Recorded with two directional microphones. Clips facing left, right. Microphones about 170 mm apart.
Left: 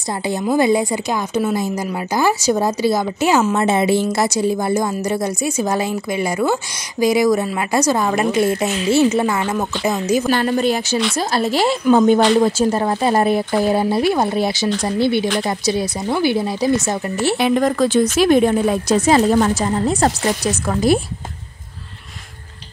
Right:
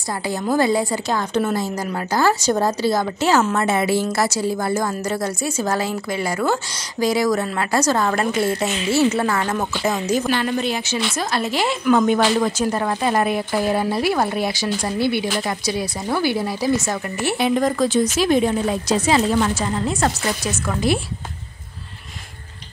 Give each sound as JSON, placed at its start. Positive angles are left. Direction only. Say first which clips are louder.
{"t": 0.3, "sound": "a woman's voice", "louder": "left 3 dB", "side_deg": 15}
{"t": 10.3, "sound": "a woman's voice", "louder": "left 4 dB", "side_deg": 45}
{"t": 17.4, "sound": "speech", "louder": "left 1 dB", "side_deg": 65}